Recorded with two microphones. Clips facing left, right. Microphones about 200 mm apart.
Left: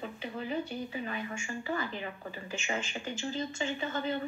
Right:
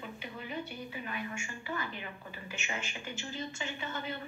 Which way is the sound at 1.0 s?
30° left (ahead or behind).